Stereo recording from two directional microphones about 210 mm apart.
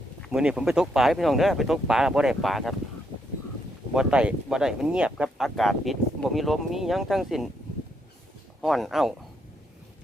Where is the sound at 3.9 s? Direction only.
5° right (ahead or behind).